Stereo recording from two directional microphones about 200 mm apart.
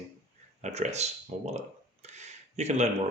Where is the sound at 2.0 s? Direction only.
35° right (ahead or behind).